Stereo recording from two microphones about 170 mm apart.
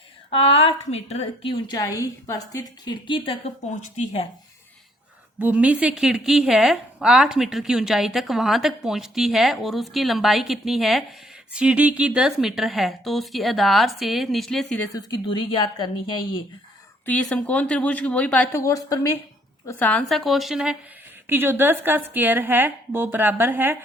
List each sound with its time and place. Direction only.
0.3 s a woman's voice: 35° left (ahead or behind)
1.8 s a woman's voice: 20° left (ahead or behind); by 4.3 s 40° left (ahead or behind)
5.4 s a woman's voice: 10° right (ahead or behind)
14.9 s a woman's voice: 25° left (ahead or behind)
17.1 s a woman's voice: 5° left (ahead or behind); by 23.7 s 10° right (ahead or behind)